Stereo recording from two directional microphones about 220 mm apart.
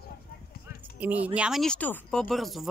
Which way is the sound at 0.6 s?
5° right (ahead or behind).